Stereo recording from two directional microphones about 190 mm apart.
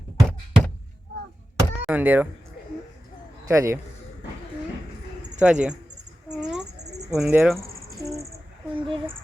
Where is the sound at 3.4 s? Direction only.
15° right (ahead or behind).